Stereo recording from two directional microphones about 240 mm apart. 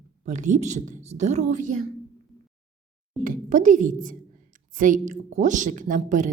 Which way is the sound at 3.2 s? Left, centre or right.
Right.